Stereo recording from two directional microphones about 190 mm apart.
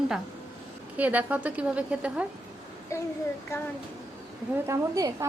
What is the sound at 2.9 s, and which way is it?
Speech, 15° left (ahead or behind).